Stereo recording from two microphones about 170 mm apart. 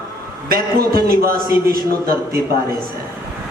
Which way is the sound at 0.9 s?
60° right (ahead or behind).